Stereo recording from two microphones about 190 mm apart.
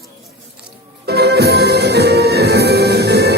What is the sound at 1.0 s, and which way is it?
Music, 60° right (ahead or behind).